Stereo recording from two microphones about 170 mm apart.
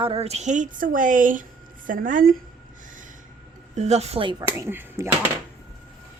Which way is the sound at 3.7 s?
40° right (ahead or behind).